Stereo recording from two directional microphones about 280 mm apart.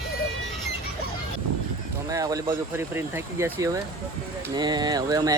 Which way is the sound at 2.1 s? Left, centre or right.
Centre.